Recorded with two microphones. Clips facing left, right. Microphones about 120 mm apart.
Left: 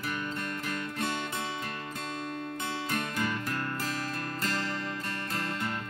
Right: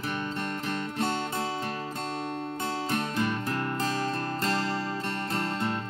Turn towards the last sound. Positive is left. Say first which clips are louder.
# right 4 dB
turn(degrees=-30)  # may be behind; listen again after turning